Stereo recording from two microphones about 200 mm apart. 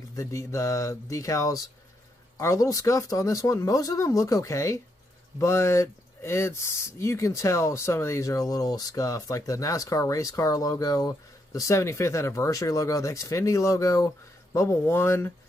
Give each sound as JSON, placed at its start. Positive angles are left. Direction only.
{"t": 0.1, "sound": "speech", "side_deg": 15}